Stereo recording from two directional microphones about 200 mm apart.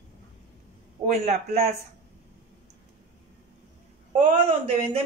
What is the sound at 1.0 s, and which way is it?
Speech, 35° right (ahead or behind).